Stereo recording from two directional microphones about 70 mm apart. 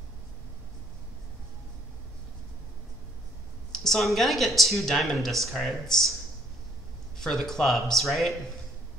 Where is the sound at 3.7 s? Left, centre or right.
Centre.